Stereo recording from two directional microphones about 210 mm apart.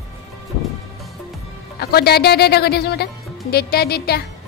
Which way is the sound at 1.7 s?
50° left (ahead or behind).